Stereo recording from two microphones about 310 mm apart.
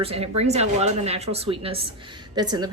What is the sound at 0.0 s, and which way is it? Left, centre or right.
A woman's voice, centre.